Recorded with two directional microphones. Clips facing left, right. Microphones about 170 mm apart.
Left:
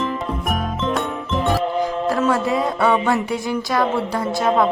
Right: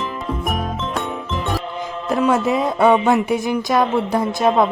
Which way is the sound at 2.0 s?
20° right (ahead or behind).